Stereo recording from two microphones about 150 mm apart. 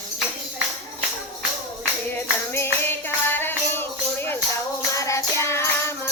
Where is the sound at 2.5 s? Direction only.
15° left (ahead or behind).